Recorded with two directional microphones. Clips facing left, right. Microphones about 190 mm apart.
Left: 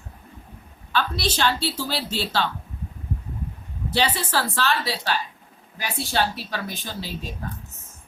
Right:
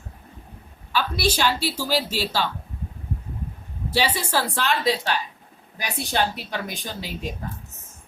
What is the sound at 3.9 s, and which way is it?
A woman's voice, 10° right (ahead or behind).